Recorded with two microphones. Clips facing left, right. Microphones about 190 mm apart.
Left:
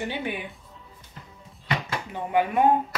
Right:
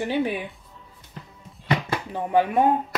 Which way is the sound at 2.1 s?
35° right (ahead or behind).